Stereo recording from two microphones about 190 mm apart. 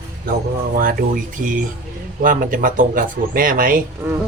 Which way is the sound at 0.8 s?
50° right (ahead or behind).